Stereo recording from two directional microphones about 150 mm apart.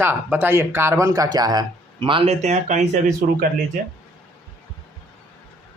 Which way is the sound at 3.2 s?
80° right.